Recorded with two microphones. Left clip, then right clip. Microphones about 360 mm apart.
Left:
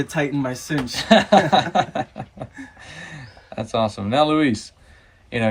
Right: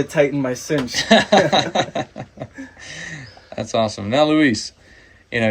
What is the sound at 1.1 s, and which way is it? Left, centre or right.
Speech, left.